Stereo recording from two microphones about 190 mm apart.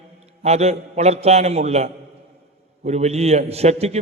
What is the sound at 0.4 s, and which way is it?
A man's voice, 35° right (ahead or behind).